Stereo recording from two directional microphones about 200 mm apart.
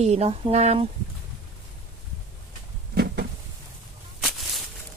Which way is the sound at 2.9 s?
55° right (ahead or behind).